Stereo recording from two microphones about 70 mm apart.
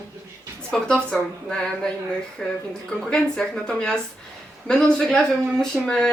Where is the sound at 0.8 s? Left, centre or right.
Centre.